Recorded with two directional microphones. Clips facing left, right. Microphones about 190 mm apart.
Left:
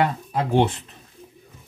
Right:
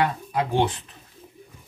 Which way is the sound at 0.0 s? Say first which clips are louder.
Left 1 dB; 25° left (ahead or behind).